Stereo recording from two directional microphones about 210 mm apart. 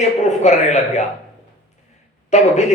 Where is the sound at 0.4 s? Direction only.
35° left (ahead or behind).